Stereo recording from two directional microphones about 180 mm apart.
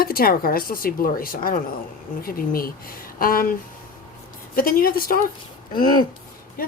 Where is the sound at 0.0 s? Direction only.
55° left (ahead or behind).